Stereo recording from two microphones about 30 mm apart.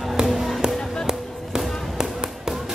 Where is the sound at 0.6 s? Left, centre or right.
Centre.